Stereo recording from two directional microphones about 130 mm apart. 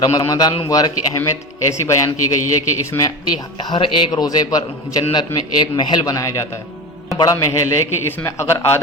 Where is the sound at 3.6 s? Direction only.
40° left (ahead or behind).